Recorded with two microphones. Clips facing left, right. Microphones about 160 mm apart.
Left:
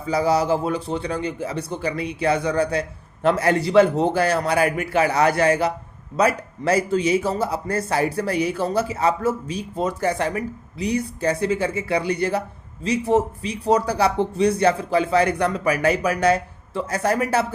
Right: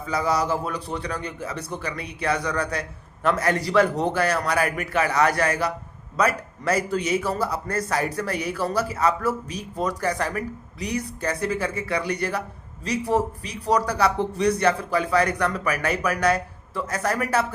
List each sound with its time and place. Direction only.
0.1 s a man's voice: 30° left (ahead or behind)